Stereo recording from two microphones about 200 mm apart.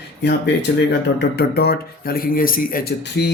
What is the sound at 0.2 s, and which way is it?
Speech, 55° left (ahead or behind).